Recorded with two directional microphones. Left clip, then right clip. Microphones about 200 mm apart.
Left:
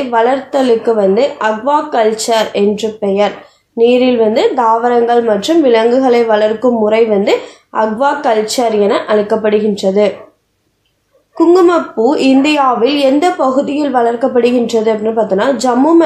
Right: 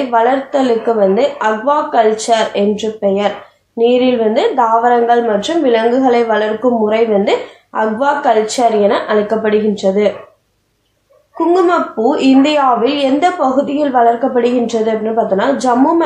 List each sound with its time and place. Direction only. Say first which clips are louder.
0.1 s a woman's voice: left 1 dB; 45° left (ahead or behind)
11.5 s a woman's voice: left 1 dB; 45° left (ahead or behind)